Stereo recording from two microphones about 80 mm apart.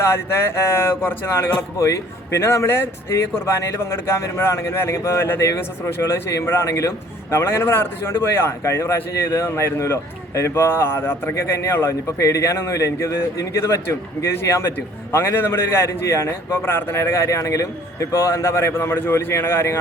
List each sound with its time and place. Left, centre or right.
0.0 s speech: left